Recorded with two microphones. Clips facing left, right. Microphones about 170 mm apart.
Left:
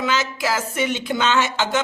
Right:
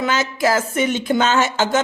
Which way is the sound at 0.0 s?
50° right (ahead or behind).